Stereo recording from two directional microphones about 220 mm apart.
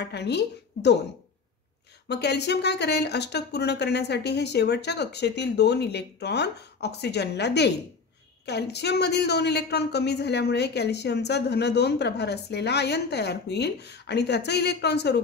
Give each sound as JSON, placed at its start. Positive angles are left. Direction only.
{"t": 0.0, "sound": "speech", "side_deg": 50}
{"t": 2.0, "sound": "speech", "side_deg": 50}